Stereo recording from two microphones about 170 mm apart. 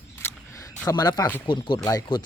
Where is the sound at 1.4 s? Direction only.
30° left (ahead or behind).